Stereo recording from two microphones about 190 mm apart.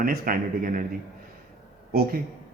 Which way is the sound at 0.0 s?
50° right (ahead or behind).